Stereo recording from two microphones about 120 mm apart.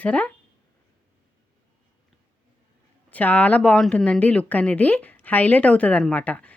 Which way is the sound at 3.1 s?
10° left (ahead or behind).